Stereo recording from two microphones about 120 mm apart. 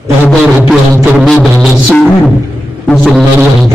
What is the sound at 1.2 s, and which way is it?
Music, centre (ahead or behind).